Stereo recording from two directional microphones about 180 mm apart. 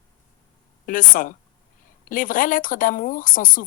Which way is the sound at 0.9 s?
50° left (ahead or behind).